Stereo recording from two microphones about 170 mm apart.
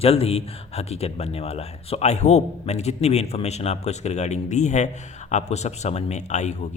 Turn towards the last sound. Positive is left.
turn(degrees=45)  # may be behind; listen again after turning